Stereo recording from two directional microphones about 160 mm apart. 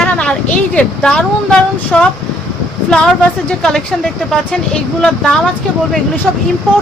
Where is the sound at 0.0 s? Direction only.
5° left (ahead or behind).